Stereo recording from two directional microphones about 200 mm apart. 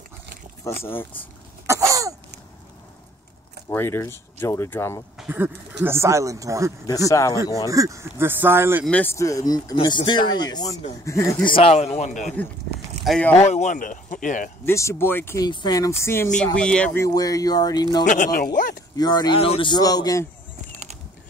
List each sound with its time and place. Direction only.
0.8 s speech: 10° left (ahead or behind)
1.7 s throat clearing: 15° right (ahead or behind)
3.6 s speech: 10° left (ahead or behind)
5.1 s speech: 5° right (ahead or behind)
7.1 s speech: 15° left (ahead or behind)
7.7 s speech: 15° right (ahead or behind)
8.8 s speech: 10° left (ahead or behind)
11.5 s speech: 30° left (ahead or behind)
13.0 s speech: centre (ahead or behind)
13.4 s speech: 35° left (ahead or behind)
14.6 s speech: 15° left (ahead or behind)
18.0 s speech: 40° left (ahead or behind)
18.9 s speech: 20° left (ahead or behind)
20.7 s typing: 35° right (ahead or behind)